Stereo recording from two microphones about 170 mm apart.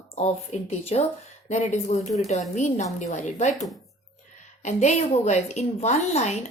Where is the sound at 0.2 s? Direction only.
40° left (ahead or behind).